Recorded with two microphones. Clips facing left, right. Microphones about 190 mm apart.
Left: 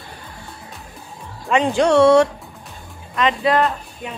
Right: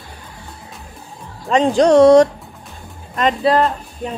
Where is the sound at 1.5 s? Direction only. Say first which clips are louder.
Right 4 dB; 40° right (ahead or behind).